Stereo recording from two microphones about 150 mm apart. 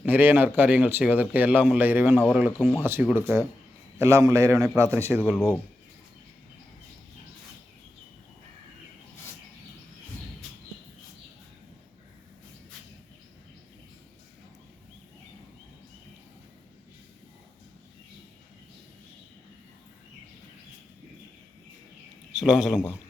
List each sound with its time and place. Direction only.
0.0 s speech: 10° right (ahead or behind)
2.3 s speech: centre (ahead or behind)
2.8 s a man's voice: 15° right (ahead or behind)
5.2 s speech: 5° left (ahead or behind)
22.3 s a man's voice: 5° right (ahead or behind)